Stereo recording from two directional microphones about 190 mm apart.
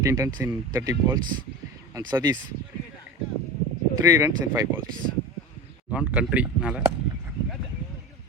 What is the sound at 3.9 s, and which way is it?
Speech, 15° right (ahead or behind).